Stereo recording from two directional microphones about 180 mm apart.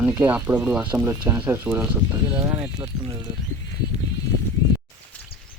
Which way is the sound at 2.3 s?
20° right (ahead or behind).